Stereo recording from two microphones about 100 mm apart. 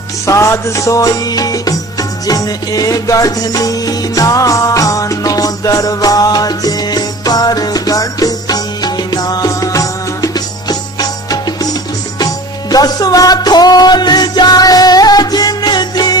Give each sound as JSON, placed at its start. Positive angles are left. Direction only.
{"t": 0.3, "sound": "music", "side_deg": 30}